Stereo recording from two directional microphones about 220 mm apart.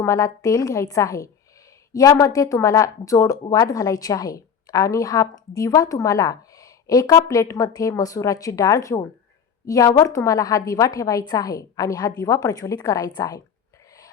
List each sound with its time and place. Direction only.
0.0 s speech: 15° left (ahead or behind)